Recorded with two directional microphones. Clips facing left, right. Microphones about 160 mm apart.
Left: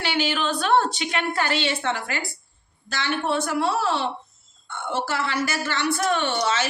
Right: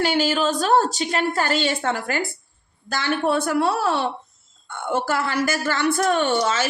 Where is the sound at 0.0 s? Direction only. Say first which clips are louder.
Right 5 dB; 45° right (ahead or behind).